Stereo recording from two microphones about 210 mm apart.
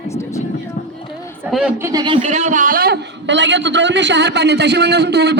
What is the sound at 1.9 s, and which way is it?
Speech, 20° right (ahead or behind).